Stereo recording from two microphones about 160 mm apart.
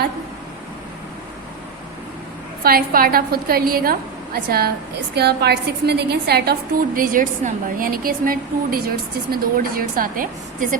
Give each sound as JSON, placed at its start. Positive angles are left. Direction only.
{"t": 2.6, "sound": "a woman's voice", "side_deg": -65}
{"t": 5.1, "sound": "a woman's voice", "side_deg": -90}